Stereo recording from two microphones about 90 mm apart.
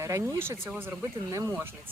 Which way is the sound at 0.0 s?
30° right (ahead or behind).